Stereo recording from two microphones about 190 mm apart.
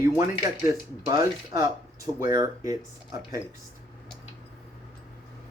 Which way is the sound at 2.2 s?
20° right (ahead or behind).